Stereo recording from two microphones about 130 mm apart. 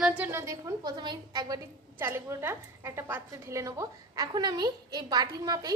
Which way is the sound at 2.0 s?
20° right (ahead or behind).